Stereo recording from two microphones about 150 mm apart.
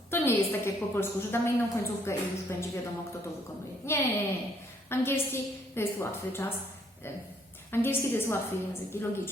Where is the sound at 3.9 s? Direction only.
20° left (ahead or behind).